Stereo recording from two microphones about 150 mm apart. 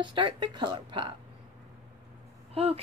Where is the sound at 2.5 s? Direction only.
40° right (ahead or behind).